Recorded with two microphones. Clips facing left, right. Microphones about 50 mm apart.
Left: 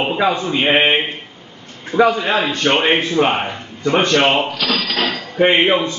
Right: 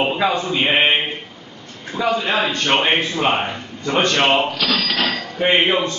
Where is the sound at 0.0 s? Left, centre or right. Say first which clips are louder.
Left 1 dB; centre.